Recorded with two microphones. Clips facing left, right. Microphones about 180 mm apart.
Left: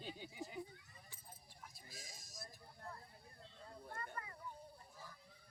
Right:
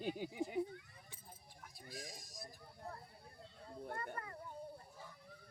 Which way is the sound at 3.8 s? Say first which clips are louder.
Right 5 dB; 60° right (ahead or behind).